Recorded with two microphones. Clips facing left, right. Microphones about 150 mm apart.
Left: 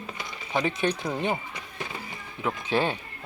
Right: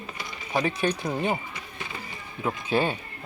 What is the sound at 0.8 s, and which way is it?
Speech, 10° right (ahead or behind).